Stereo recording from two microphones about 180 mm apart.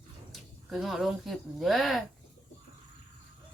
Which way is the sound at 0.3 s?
Centre (ahead or behind).